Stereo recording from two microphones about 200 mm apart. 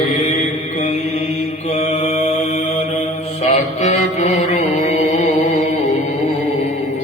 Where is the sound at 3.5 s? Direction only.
35° left (ahead or behind).